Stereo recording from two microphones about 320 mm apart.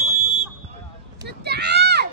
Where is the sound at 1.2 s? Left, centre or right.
Right.